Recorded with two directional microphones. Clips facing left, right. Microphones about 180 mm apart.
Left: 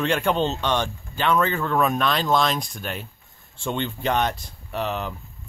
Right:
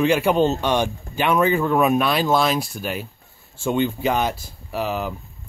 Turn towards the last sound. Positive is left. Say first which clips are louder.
# right 3 dB
turn(degrees=-5)  # may be behind; listen again after turning